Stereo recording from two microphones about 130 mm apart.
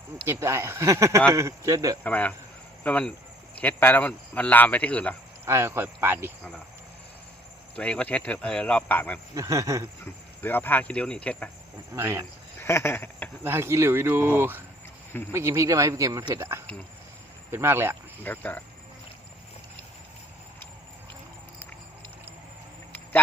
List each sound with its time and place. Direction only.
0.3 s speech: 20° right (ahead or behind)
2.0 s speech: 10° left (ahead or behind)
5.5 s speech: 20° right (ahead or behind)
7.8 s speech: 10° left (ahead or behind)
9.3 s speech: 25° right (ahead or behind)
10.4 s speech: 15° left (ahead or behind)
11.9 s speech: 20° right (ahead or behind)
12.6 s a sound: 20° left (ahead or behind)
13.4 s speech: 20° right (ahead or behind)
18.2 s speech: 15° left (ahead or behind)